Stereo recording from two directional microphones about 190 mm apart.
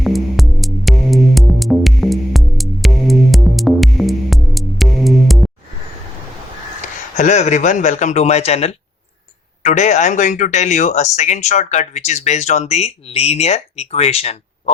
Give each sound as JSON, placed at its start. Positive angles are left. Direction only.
{"t": 0.0, "sound": "music", "side_deg": 0}
{"t": 6.8, "sound": "a man's voice", "side_deg": 40}